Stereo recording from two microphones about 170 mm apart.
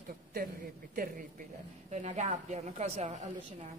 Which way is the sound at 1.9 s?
40° right (ahead or behind).